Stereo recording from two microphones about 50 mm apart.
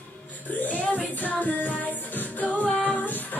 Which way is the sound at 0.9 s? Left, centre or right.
Left.